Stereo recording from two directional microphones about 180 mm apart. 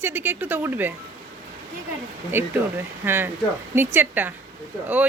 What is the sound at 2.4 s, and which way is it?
Speech, 10° right (ahead or behind).